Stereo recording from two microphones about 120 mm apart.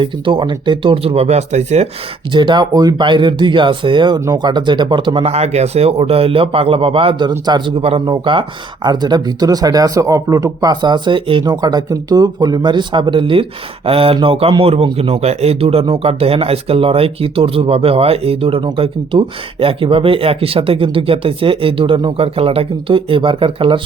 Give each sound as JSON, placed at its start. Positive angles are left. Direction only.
{"t": 0.0, "sound": "speech", "side_deg": -40}
{"t": 2.3, "sound": "speech", "side_deg": -40}
{"t": 5.3, "sound": "speech", "side_deg": -65}
{"t": 7.8, "sound": "speech", "side_deg": -50}
{"t": 11.5, "sound": "speech", "side_deg": -35}